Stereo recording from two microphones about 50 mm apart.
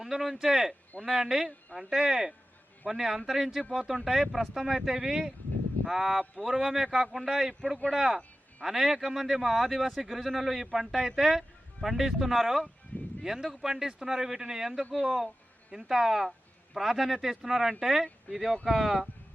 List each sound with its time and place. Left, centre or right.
0.0 s speech: centre
12.9 s a sound: left
13.2 s speech: centre